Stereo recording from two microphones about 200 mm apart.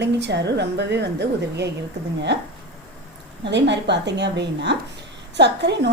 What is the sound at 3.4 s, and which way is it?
A woman's voice, 60° right (ahead or behind).